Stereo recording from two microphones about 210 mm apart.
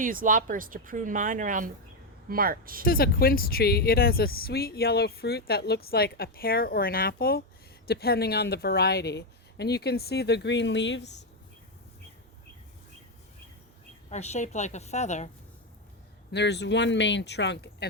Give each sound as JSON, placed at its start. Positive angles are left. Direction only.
{"t": 0.0, "sound": "speech", "side_deg": -40}
{"t": 2.8, "sound": "speech", "side_deg": 45}
{"t": 14.1, "sound": "a woman's voice", "side_deg": 30}
{"t": 16.3, "sound": "speech", "side_deg": 55}